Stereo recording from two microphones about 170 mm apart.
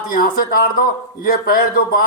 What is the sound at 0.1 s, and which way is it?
A man's voice, 55° left (ahead or behind).